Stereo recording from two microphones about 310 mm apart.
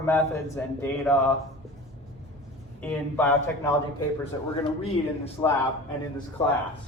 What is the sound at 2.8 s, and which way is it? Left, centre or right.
Speech, centre.